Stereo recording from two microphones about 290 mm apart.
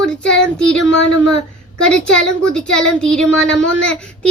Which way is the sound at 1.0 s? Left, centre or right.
Right.